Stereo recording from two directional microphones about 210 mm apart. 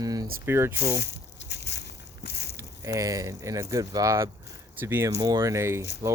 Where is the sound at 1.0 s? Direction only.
55° left (ahead or behind).